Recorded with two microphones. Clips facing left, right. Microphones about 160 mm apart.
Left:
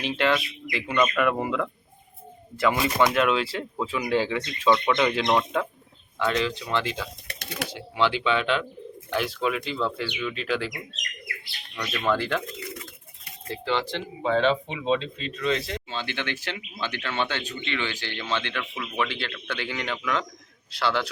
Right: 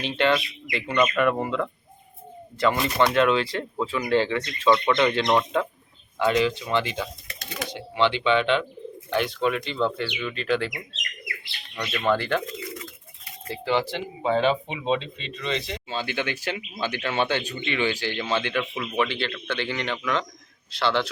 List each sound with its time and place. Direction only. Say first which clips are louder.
0.0 s speech: right 1 dB; centre (ahead or behind)
7.3 s bird: even; 65° left (ahead or behind)
7.7 s speech: right 2 dB; 5° left (ahead or behind)
11.8 s speech: right 1 dB; centre (ahead or behind)
13.5 s speech: right 2 dB; 5° right (ahead or behind)
15.9 s speech: right 6 dB; 10° right (ahead or behind); by 21.1 s 10° left (ahead or behind)